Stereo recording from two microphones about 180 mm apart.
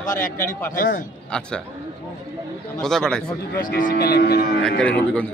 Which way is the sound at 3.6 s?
50° left (ahead or behind).